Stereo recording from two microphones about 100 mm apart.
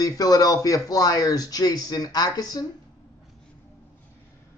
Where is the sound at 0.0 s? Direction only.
35° left (ahead or behind).